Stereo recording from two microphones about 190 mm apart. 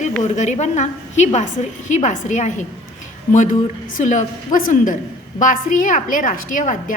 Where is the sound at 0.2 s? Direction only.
40° left (ahead or behind).